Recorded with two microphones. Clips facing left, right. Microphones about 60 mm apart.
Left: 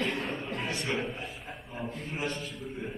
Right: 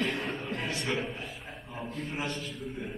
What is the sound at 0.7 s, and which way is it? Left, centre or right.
Speech, centre.